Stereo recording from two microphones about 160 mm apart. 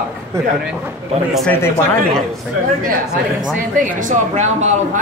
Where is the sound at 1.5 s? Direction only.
15° left (ahead or behind).